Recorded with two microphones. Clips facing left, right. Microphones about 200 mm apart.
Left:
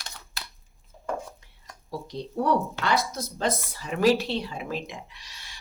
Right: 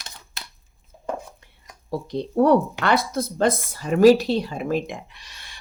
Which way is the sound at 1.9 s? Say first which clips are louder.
Right 7 dB; 60° right (ahead or behind).